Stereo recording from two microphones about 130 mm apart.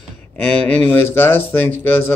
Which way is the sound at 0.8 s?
20° left (ahead or behind).